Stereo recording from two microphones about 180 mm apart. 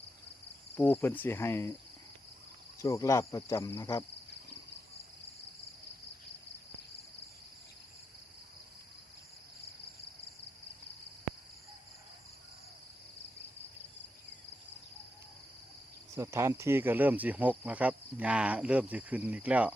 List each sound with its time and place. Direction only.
0.8 s speech: 10° left (ahead or behind)
2.8 s speech: 15° left (ahead or behind)
16.1 s speech: 15° right (ahead or behind)